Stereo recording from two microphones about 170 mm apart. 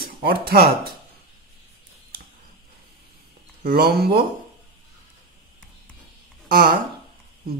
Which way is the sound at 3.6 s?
65° right (ahead or behind).